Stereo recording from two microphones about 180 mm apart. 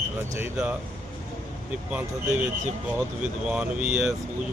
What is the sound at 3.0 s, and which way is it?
Speech, 5° right (ahead or behind).